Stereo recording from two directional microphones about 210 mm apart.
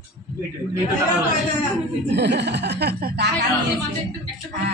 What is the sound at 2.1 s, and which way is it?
Speech, 55° right (ahead or behind).